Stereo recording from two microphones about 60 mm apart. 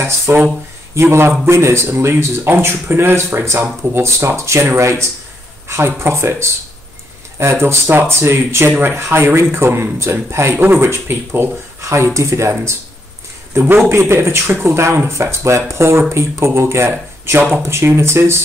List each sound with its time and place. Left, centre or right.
0.3 s a man's voice: right
13.8 s a man's voice: right